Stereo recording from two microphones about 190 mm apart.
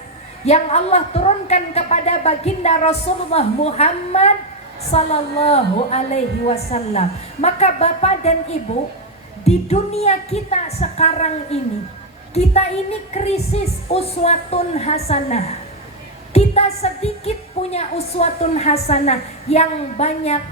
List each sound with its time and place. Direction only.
0.4 s a woman's voice: 35° left (ahead or behind)
9.4 s a woman's voice: 35° left (ahead or behind)